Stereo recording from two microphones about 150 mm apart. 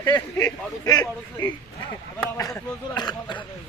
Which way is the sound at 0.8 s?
25° left (ahead or behind).